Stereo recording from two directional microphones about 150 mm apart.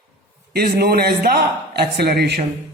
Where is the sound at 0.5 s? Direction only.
90° right.